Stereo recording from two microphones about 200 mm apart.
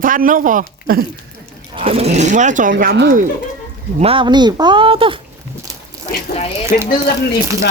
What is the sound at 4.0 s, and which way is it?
Speech, 25° right (ahead or behind).